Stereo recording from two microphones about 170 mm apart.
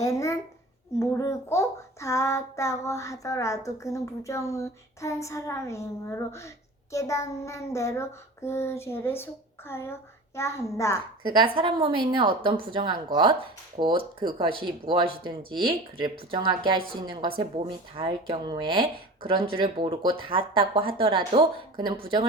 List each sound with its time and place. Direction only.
0.0 s a sound: 20° left (ahead or behind)
0.9 s a child's voice: 15° left (ahead or behind)
11.3 s speech: 30° right (ahead or behind)